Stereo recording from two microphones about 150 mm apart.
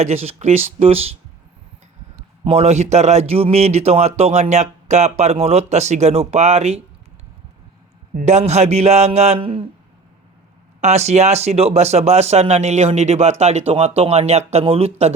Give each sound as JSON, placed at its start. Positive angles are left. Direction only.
{"t": 0.0, "sound": "speech", "side_deg": -45}
{"t": 2.4, "sound": "speech", "side_deg": -45}
{"t": 8.2, "sound": "speech", "side_deg": -50}
{"t": 10.8, "sound": "speech", "side_deg": -45}